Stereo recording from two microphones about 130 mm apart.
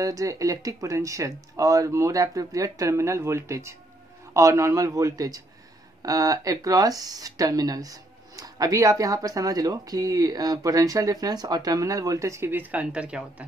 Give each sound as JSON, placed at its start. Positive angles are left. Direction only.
{"t": 0.0, "sound": "speech", "side_deg": -25}